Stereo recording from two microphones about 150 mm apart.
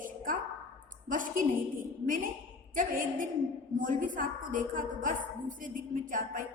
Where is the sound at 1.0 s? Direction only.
65° right (ahead or behind).